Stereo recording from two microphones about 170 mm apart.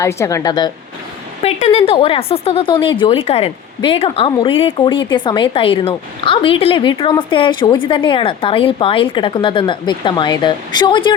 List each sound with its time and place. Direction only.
0.0 s a woman's voice: 15° left (ahead or behind)
1.4 s a woman's voice: 40° left (ahead or behind)